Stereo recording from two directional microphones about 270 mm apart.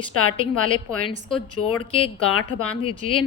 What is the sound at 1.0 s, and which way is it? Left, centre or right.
Speech, centre.